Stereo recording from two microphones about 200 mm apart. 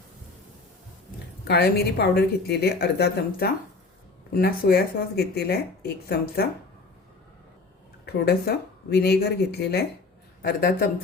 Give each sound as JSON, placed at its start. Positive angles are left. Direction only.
{"t": 1.5, "sound": "speech", "side_deg": 50}
{"t": 8.0, "sound": "speech", "side_deg": 50}